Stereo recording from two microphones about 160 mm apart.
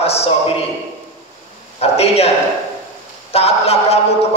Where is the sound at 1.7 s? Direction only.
40° left (ahead or behind).